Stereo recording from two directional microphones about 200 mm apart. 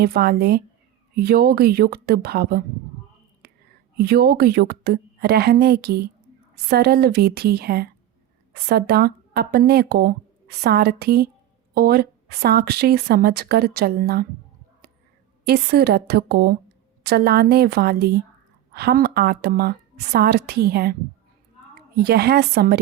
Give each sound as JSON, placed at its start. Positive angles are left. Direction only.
{"t": 0.0, "sound": "a woman's voice", "side_deg": -50}
{"t": 3.4, "sound": "whispering", "side_deg": -55}
{"t": 3.9, "sound": "a woman's voice", "side_deg": -55}
{"t": 15.4, "sound": "a woman's voice", "side_deg": -55}